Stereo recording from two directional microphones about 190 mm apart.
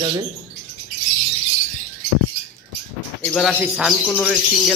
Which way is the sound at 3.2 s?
5° left (ahead or behind).